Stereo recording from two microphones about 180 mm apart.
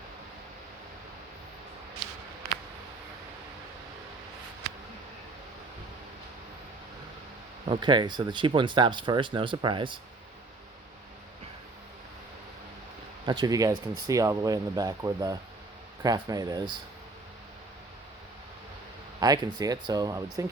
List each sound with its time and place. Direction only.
7.6 s speech: 30° right (ahead or behind)
13.2 s speech: 25° right (ahead or behind)
19.2 s speech: 20° right (ahead or behind)